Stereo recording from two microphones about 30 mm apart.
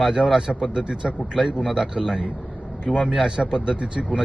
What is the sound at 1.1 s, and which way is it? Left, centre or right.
A man's voice, right.